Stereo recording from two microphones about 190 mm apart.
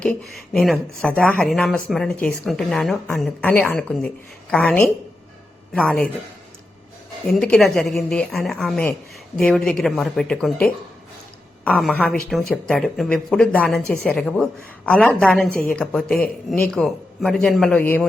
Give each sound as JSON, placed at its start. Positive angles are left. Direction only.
{"t": 0.0, "sound": "a woman's voice", "side_deg": 5}
{"t": 7.3, "sound": "a woman's voice", "side_deg": 5}